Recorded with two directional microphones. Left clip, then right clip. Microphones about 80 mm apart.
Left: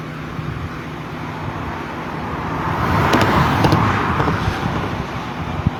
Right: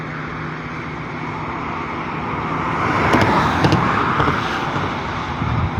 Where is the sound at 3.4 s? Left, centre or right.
Centre.